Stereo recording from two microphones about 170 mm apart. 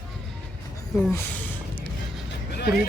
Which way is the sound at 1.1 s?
10° left (ahead or behind).